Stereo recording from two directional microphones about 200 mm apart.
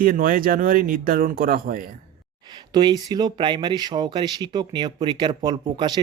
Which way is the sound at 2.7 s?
20° right (ahead or behind).